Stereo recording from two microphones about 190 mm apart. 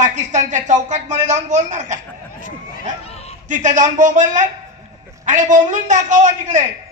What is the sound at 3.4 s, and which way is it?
Speech, 40° right (ahead or behind).